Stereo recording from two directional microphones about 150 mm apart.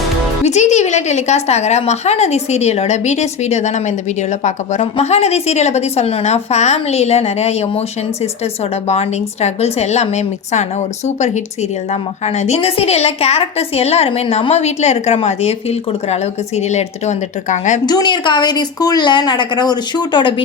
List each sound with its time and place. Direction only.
0.4 s a woman's voice: 50° left (ahead or behind)
17.8 s a woman's voice: 30° left (ahead or behind)